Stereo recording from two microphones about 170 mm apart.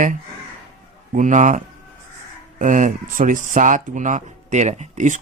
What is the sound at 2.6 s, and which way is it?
Speech, 50° right (ahead or behind).